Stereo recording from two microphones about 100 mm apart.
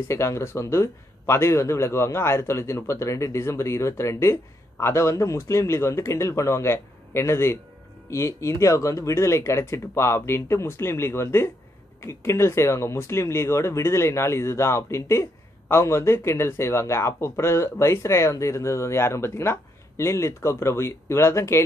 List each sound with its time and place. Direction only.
0.1 s a man's voice: 30° left (ahead or behind)